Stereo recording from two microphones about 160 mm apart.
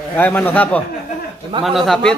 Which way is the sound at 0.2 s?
10° left (ahead or behind).